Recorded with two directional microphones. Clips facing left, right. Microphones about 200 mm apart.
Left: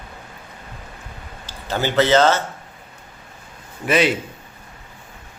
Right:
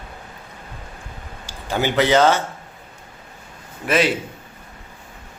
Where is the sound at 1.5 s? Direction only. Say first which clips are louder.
Right 1 dB; 15° right (ahead or behind).